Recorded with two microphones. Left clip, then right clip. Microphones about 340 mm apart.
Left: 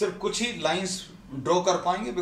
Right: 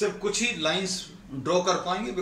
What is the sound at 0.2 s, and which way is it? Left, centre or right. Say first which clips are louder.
Speech: right 1 dB; centre.